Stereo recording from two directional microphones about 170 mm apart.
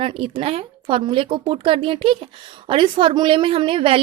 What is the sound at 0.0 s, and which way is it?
A woman's voice, 30° right (ahead or behind).